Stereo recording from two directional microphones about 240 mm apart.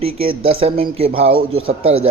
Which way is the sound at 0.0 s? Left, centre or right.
Right.